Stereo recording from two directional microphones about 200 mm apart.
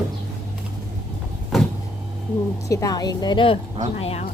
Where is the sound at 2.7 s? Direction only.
15° left (ahead or behind).